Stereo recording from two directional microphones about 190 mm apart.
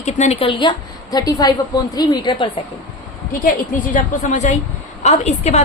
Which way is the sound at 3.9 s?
45° left (ahead or behind).